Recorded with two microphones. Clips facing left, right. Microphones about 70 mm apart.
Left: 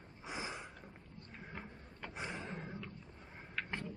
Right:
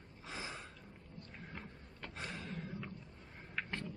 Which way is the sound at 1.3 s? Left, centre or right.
Centre.